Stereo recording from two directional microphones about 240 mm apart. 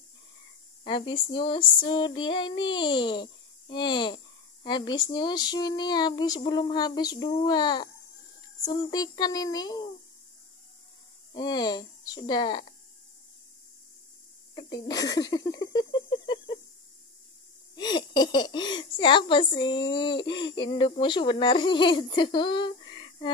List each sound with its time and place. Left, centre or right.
0.8 s speech: left
11.3 s speech: centre
14.5 s a sound: centre
17.7 s speech: centre